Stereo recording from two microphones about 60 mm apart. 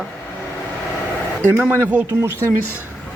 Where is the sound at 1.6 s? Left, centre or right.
Right.